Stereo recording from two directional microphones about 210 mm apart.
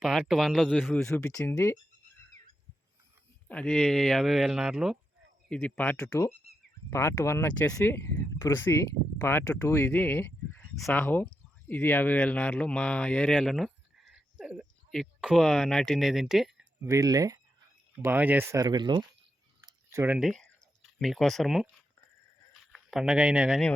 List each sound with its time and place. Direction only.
0.0 s speech: centre (ahead or behind)
1.3 s speech: 15° left (ahead or behind)
3.5 s speech: 5° left (ahead or behind)
16.8 s speech: 15° right (ahead or behind)
19.6 s drip: 10° right (ahead or behind)
21.0 s speech: centre (ahead or behind)
22.7 s speech: centre (ahead or behind)